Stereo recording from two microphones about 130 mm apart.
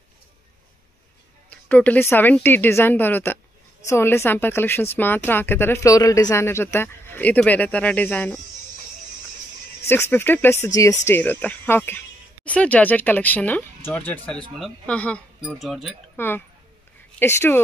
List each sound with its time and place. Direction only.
1.5 s speech: 10° left (ahead or behind)
9.8 s speech: 20° left (ahead or behind)
15.4 s speech: centre (ahead or behind)
16.2 s speech: 15° left (ahead or behind)